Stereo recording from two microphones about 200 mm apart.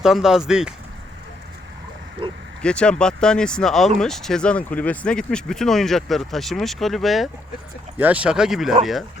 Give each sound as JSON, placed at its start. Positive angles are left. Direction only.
{"t": 0.0, "sound": "speech", "side_deg": 0}
{"t": 2.2, "sound": "oink", "side_deg": -25}
{"t": 2.6, "sound": "speech", "side_deg": 5}